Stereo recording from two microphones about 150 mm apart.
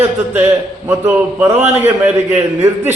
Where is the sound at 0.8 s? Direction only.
10° right (ahead or behind).